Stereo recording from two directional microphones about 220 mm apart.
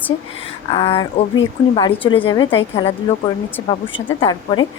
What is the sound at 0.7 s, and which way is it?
A woman's voice, 20° left (ahead or behind).